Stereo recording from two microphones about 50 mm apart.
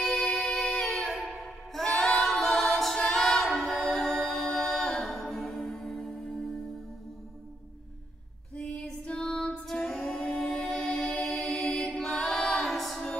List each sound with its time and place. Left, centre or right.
0.0 s music: centre
2.1 s a capella: centre
3.6 s music: left
3.9 s music: centre
8.5 s female singing: centre
9.0 s music: centre
9.5 s music: centre
12.0 s a capella: centre